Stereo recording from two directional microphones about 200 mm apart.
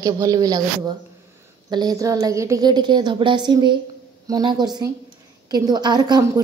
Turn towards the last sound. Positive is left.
turn(degrees=-20)  # may be behind; listen again after turning